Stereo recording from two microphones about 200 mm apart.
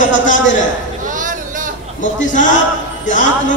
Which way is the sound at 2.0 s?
40° left (ahead or behind).